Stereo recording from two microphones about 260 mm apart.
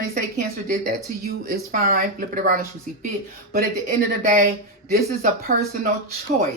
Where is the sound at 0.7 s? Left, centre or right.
Right.